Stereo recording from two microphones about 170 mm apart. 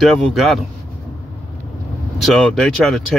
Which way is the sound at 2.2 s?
Centre (ahead or behind).